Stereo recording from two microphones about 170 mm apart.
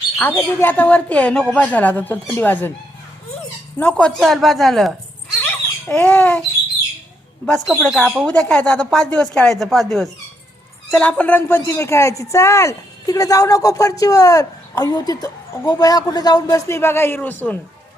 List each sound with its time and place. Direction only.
0.2 s speech: 10° left (ahead or behind)
3.8 s speech: 5° left (ahead or behind)
7.4 s speech: 5° left (ahead or behind)